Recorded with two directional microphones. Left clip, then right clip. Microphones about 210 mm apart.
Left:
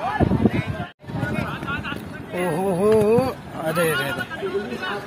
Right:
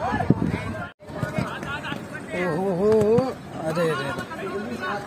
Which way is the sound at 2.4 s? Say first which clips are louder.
Left 2 dB; 5° left (ahead or behind).